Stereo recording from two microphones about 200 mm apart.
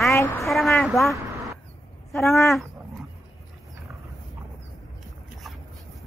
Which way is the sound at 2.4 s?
Centre (ahead or behind).